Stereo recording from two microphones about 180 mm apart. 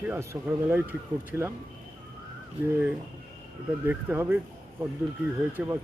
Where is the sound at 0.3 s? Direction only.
15° right (ahead or behind).